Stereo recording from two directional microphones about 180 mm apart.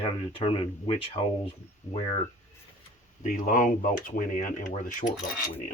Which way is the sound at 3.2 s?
45° left (ahead or behind).